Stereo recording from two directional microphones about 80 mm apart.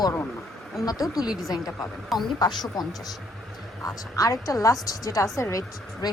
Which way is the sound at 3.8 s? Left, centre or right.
Left.